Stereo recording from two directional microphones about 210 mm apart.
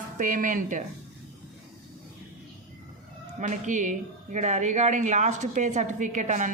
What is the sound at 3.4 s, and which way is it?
Speech, 35° right (ahead or behind).